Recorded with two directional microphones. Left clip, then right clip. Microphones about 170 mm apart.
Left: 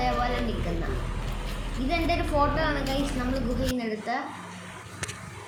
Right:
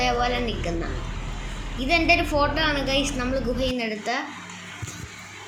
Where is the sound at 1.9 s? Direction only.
20° right (ahead or behind).